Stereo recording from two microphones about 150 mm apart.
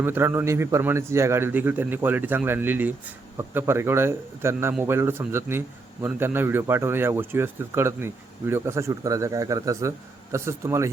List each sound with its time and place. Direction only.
0.0 s a man's voice: 15° right (ahead or behind)